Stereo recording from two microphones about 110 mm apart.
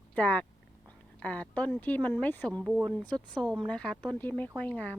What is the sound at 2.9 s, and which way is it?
Speech, 10° left (ahead or behind).